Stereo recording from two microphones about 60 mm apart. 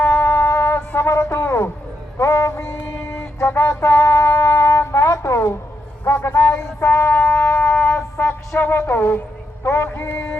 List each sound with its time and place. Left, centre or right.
0.0 s music: left
6.1 s a sound: left
6.8 s music: left
8.3 s speech: left
9.6 s music: left